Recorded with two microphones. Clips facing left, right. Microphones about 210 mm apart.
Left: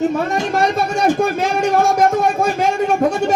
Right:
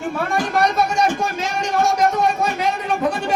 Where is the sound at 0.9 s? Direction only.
55° left (ahead or behind).